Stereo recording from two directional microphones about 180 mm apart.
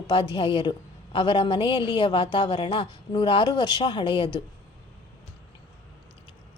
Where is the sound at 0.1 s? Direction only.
30° left (ahead or behind).